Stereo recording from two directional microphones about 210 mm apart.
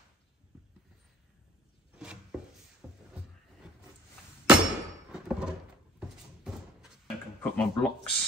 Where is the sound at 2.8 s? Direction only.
5° right (ahead or behind).